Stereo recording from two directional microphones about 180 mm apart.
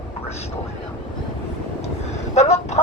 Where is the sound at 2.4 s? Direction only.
35° left (ahead or behind).